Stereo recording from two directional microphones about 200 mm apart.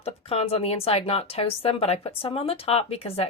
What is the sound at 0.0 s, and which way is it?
Speech, 30° left (ahead or behind).